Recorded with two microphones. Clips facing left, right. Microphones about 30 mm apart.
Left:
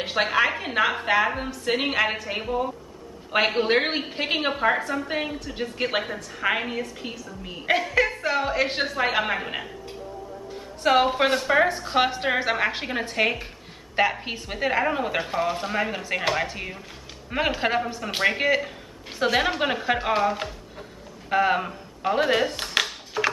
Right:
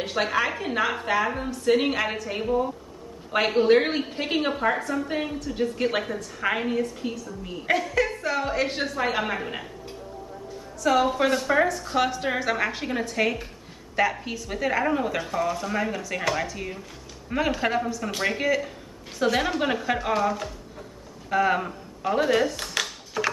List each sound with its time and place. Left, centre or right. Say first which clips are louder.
0.0 s a woman's voice: left 3 dB; left
10.8 s a woman's voice: left 2 dB; left
11.1 s a woman's voice: left 1 dB; left
23.2 s mechanisms: left 2 dB; left